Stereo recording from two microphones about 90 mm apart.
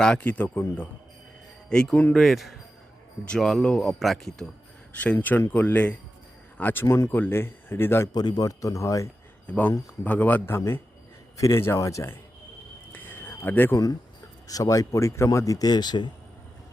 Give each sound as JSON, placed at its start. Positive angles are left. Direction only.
{"t": 0.0, "sound": "speech", "side_deg": 10}
{"t": 1.7, "sound": "speech", "side_deg": 5}
{"t": 4.9, "sound": "speech", "side_deg": 20}
{"t": 6.8, "sound": "speech", "side_deg": 35}
{"t": 7.1, "sound": "speech", "side_deg": 25}
{"t": 8.1, "sound": "speech", "side_deg": 50}
{"t": 9.5, "sound": "speech", "side_deg": 15}
{"t": 11.3, "sound": "speech", "side_deg": 35}
{"t": 12.9, "sound": "a sound", "side_deg": 20}
{"t": 14.4, "sound": "speech", "side_deg": 40}